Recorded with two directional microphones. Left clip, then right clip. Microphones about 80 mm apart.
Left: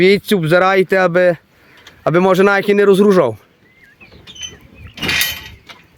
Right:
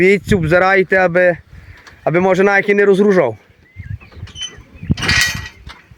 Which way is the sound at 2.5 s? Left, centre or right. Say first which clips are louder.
Even; left.